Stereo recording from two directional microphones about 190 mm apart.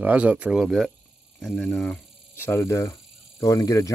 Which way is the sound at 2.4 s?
10° left (ahead or behind).